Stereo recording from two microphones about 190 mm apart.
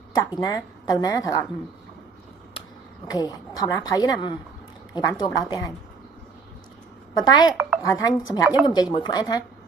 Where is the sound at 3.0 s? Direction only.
20° left (ahead or behind).